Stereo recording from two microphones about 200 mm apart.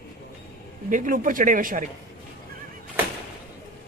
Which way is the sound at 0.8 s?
40° right (ahead or behind).